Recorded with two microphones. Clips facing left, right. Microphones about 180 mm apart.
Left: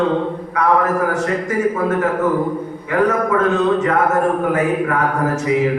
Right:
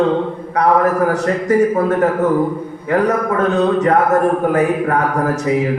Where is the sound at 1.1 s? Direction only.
35° right (ahead or behind).